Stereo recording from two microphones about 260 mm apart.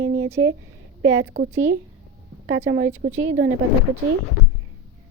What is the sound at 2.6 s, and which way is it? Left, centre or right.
Speech, right.